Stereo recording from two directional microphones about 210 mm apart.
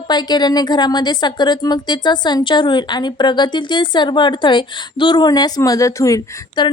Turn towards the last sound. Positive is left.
turn(degrees=15)  # may be behind; listen again after turning